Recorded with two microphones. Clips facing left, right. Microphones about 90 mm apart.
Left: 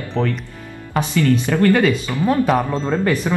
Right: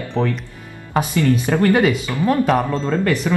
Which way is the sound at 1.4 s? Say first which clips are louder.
Even; 20° right (ahead or behind).